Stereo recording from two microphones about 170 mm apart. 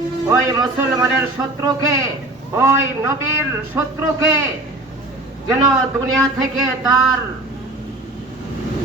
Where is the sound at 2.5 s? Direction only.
15° right (ahead or behind).